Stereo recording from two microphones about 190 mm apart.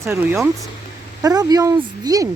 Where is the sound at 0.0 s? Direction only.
15° right (ahead or behind).